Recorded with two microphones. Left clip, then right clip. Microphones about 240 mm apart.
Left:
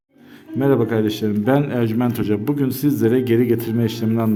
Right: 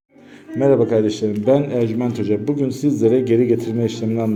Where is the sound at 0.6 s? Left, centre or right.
Centre.